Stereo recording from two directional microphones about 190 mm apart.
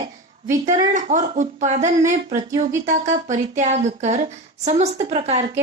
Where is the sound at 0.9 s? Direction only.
40° right (ahead or behind).